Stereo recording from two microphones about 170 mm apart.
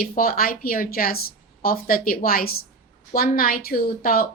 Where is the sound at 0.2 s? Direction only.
60° left (ahead or behind).